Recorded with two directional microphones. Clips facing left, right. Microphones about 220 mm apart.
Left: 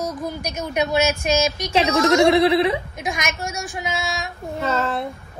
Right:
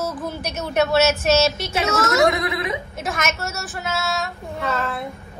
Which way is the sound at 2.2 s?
30° left (ahead or behind).